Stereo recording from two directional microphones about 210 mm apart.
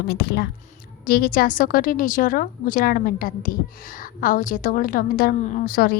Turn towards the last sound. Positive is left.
turn(degrees=45)  # may be behind; listen again after turning